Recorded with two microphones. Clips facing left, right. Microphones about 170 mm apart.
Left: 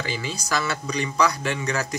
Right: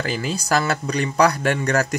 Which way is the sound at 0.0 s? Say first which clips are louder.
Right 5 dB; 50° right (ahead or behind).